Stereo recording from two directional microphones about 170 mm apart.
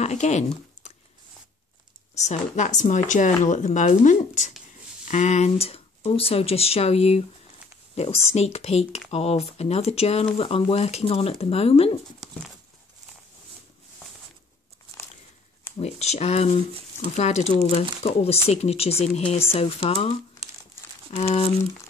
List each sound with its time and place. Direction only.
0.0 s a sound: 40° left (ahead or behind)
2.1 s speech: 45° left (ahead or behind)
15.8 s speech: 40° left (ahead or behind)
21.2 s speech: 40° left (ahead or behind)